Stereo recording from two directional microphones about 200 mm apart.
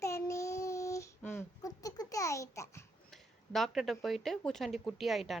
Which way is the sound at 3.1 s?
Centre (ahead or behind).